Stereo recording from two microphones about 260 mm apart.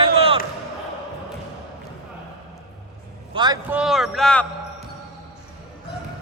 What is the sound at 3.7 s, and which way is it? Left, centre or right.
Speech, centre.